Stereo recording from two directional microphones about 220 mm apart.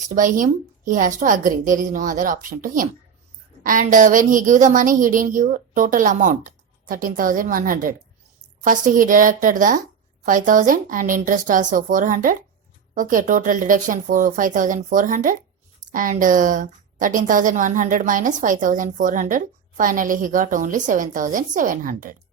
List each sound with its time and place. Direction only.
0.0 s a woman's voice: 35° right (ahead or behind)